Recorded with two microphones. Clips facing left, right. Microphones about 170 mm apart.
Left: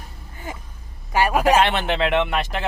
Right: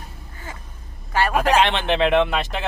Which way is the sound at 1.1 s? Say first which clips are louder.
Left 1 dB; 10° left (ahead or behind).